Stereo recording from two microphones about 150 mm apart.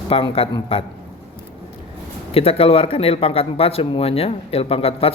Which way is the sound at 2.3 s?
40° left (ahead or behind).